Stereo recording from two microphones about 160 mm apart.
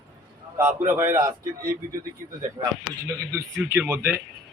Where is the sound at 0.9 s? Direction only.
15° right (ahead or behind).